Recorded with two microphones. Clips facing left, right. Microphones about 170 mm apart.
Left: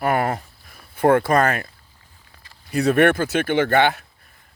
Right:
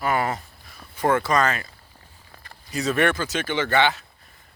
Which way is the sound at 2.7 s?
55° left (ahead or behind).